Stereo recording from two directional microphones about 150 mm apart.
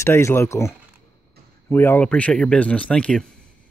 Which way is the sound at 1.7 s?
15° left (ahead or behind).